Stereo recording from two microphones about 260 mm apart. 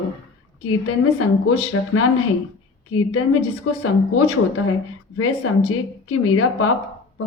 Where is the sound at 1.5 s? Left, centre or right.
Left.